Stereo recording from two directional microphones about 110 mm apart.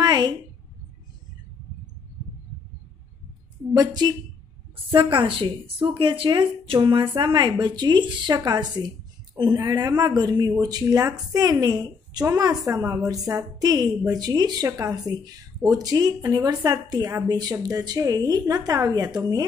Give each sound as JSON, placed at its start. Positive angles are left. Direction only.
{"t": 0.0, "sound": "a sound", "side_deg": -40}
{"t": 3.7, "sound": "a woman's voice", "side_deg": -40}
{"t": 5.2, "sound": "a woman's voice", "side_deg": -55}